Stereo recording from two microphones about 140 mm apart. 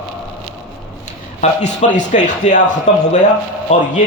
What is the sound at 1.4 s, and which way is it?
Speech, 60° left (ahead or behind).